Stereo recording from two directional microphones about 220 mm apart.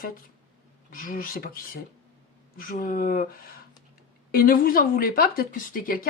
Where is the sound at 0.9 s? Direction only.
40° left (ahead or behind).